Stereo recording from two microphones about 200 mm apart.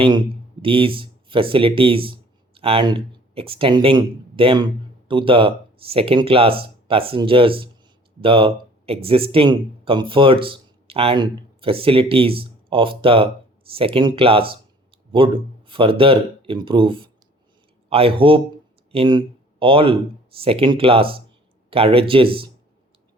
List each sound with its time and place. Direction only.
0.6 s speech: 25° right (ahead or behind)